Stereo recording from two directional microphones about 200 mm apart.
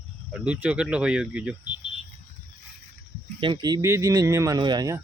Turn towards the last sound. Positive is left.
turn(degrees=-20)  # may be behind; listen again after turning